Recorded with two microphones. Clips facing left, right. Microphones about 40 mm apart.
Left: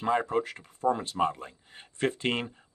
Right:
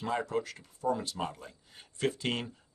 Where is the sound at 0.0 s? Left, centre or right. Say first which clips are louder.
Left 5 dB; left.